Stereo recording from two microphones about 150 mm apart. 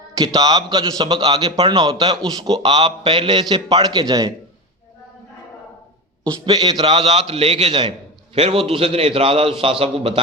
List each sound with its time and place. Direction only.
0.3 s a man's voice: 30° right (ahead or behind)
6.4 s a man's voice: 30° right (ahead or behind)